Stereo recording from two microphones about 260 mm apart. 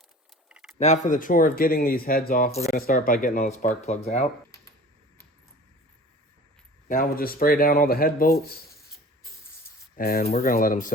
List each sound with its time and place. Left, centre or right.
0.4 s a sound: centre
0.8 s speech: left
6.8 s speech: left
9.9 s speech: left